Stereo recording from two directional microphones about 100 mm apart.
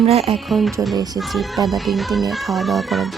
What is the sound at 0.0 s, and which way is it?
Speech, 90° right.